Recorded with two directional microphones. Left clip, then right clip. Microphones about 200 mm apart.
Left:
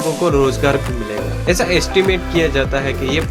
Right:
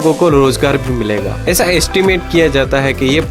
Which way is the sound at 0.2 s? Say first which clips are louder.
Right 5 dB; 40° right (ahead or behind).